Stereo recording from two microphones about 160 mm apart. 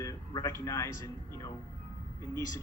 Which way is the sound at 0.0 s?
20° left (ahead or behind).